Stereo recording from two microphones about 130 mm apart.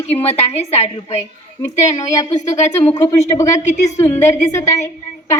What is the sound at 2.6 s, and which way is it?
A woman's voice, 65° left (ahead or behind).